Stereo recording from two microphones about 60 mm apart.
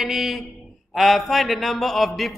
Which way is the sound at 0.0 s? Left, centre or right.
Centre.